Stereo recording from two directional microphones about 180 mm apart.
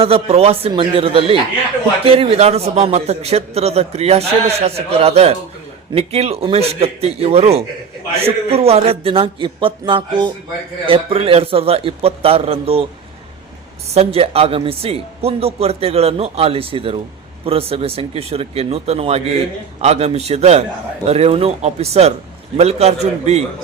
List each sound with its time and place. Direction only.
0.0 s a man's voice: 35° right (ahead or behind)
13.9 s a man's voice: 35° right (ahead or behind)